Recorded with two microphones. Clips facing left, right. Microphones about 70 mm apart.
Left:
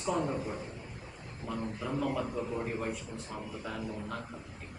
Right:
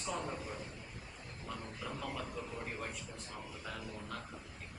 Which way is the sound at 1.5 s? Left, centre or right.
Centre.